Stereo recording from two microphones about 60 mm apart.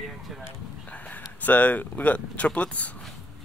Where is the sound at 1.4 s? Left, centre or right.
Left.